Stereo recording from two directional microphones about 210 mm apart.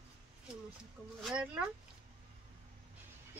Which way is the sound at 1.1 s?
5° right (ahead or behind).